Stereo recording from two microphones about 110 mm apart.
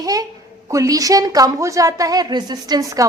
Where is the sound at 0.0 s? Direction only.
35° right (ahead or behind).